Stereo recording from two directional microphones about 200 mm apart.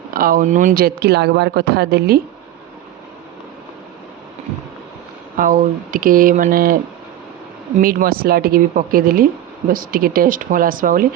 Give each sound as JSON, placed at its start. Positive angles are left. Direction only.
{"t": 0.1, "sound": "speech", "side_deg": -45}
{"t": 5.4, "sound": "speech", "side_deg": -45}
{"t": 7.8, "sound": "speech", "side_deg": -45}